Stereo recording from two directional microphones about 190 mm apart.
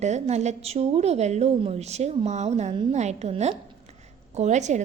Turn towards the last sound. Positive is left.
turn(degrees=-40)  # may be behind; listen again after turning